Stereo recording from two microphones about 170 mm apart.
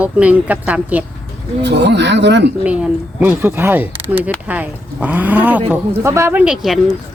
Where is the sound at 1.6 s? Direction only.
90° right.